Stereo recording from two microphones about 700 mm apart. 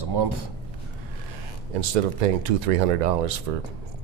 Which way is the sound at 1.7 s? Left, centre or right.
Right.